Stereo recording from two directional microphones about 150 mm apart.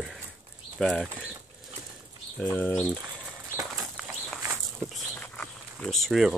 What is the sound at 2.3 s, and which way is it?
Speech, 10° left (ahead or behind).